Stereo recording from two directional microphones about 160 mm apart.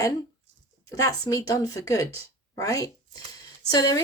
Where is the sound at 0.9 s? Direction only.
20° left (ahead or behind).